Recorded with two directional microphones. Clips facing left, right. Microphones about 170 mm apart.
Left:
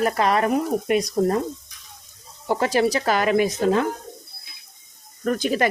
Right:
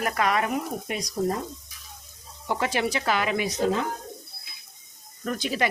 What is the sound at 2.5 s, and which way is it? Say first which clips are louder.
Speech: left 6 dB; 40° left (ahead or behind).